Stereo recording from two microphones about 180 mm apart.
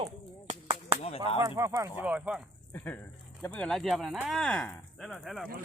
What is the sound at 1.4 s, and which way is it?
Speech, 15° right (ahead or behind).